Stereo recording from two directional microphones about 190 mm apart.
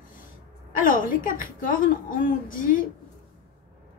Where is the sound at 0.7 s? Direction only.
45° left (ahead or behind).